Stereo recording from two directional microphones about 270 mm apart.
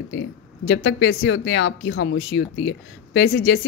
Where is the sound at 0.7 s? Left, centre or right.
Left.